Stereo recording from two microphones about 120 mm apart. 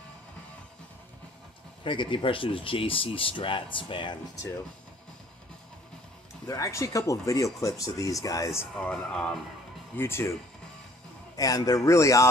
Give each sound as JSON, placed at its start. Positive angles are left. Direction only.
{"t": 1.8, "sound": "speech", "side_deg": 45}
{"t": 6.4, "sound": "speech", "side_deg": 25}
{"t": 8.7, "sound": "speech", "side_deg": 10}
{"t": 9.9, "sound": "speech", "side_deg": 20}
{"t": 11.3, "sound": "speech", "side_deg": 30}